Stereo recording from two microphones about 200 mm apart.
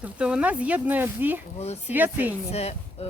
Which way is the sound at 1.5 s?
30° left (ahead or behind).